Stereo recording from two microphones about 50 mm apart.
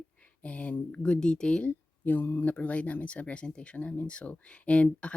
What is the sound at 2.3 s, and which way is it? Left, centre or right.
Speech, left.